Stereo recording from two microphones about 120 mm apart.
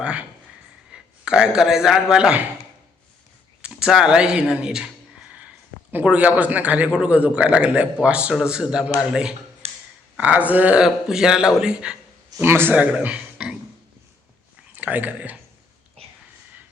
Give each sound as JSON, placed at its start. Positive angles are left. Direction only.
{"t": 0.0, "sound": "a man's voice", "side_deg": -10}
{"t": 3.6, "sound": "a man's voice", "side_deg": -5}
{"t": 5.9, "sound": "a man's voice", "side_deg": -10}
{"t": 9.6, "sound": "clicking", "side_deg": -60}
{"t": 10.2, "sound": "a man's voice", "side_deg": -10}
{"t": 12.4, "sound": "speech", "side_deg": -20}
{"t": 14.7, "sound": "speech", "side_deg": -15}